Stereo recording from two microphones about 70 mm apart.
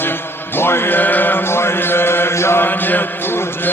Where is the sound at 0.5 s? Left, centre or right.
Left.